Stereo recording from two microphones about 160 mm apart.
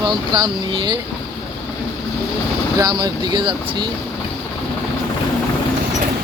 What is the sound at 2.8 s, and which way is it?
Speech, 30° right (ahead or behind).